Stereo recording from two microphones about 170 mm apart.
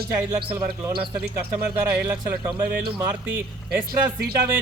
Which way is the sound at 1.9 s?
20° right (ahead or behind).